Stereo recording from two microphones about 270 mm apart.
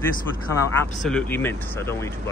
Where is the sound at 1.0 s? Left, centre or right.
Centre.